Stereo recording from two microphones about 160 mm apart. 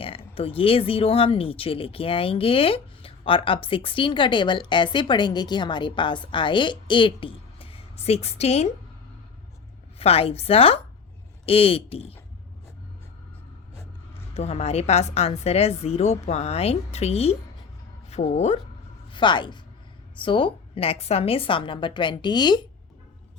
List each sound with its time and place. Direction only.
0.0 s speech: 35° left (ahead or behind)
10.0 s speech: 40° left (ahead or behind)
14.3 s a woman's voice: 40° left (ahead or behind)
19.1 s speech: 30° left (ahead or behind)